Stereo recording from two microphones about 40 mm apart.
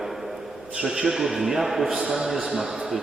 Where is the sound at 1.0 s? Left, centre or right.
Centre.